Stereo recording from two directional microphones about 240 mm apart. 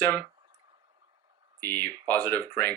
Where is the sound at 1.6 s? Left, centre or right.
Centre.